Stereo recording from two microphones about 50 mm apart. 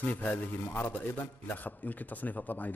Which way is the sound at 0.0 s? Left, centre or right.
Left.